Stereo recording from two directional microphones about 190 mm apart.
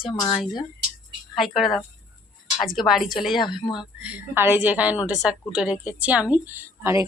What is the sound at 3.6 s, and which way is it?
Speech, 25° left (ahead or behind).